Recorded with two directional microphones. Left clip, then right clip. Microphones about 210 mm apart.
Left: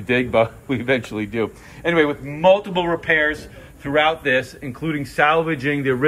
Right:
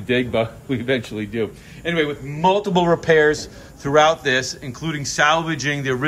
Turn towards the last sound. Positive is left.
turn(degrees=0)  # may be behind; listen again after turning